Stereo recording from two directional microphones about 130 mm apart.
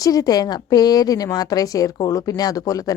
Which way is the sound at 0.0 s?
25° left (ahead or behind).